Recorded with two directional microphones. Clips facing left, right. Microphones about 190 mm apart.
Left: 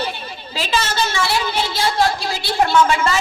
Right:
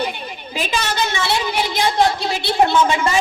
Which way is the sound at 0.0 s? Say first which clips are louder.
Right 2 dB; 15° right (ahead or behind).